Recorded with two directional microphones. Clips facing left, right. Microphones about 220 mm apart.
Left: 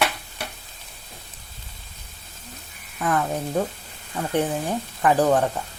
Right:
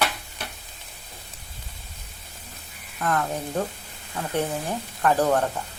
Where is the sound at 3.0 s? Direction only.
5° left (ahead or behind).